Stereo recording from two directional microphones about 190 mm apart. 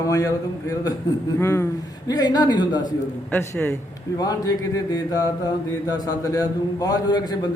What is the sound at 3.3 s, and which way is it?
Speech, 15° left (ahead or behind).